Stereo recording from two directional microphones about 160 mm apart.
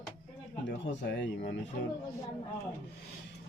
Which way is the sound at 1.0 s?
90° left.